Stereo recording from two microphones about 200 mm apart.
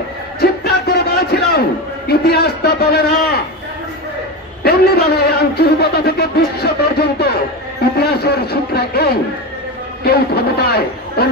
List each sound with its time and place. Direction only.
0.4 s music: 50° left (ahead or behind)
2.0 s a man's voice: 55° left (ahead or behind)
4.6 s a man's voice: 50° left (ahead or behind)